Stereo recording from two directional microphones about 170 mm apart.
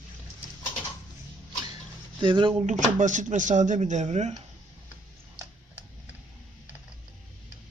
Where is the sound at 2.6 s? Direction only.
45° right (ahead or behind).